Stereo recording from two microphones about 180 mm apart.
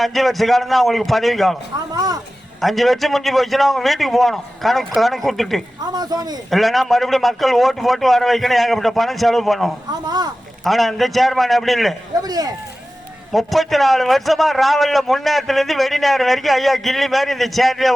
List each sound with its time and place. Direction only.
0.0 s a man's voice: centre (ahead or behind)
2.6 s a man's voice: centre (ahead or behind)
5.8 s speech: 20° right (ahead or behind)
6.5 s a man's voice: centre (ahead or behind)
9.9 s speech: 20° right (ahead or behind)
10.6 s a man's voice: centre (ahead or behind)
12.2 s speech: 20° right (ahead or behind)
13.3 s a man's voice: centre (ahead or behind)